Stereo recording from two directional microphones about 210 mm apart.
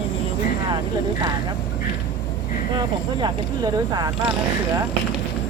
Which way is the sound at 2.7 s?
20° right (ahead or behind).